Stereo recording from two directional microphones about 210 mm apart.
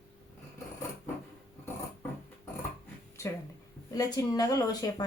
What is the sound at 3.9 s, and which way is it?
Speech, 15° left (ahead or behind).